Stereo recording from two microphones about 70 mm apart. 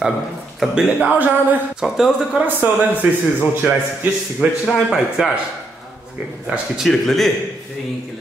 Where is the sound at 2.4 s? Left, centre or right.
Right.